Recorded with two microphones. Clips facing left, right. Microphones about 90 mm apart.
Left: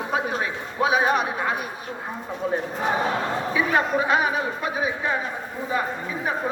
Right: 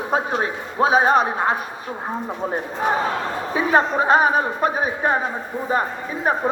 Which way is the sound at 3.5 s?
40° right (ahead or behind).